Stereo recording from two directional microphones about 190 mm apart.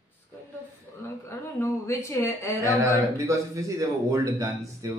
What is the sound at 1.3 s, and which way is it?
A woman's voice, 15° left (ahead or behind).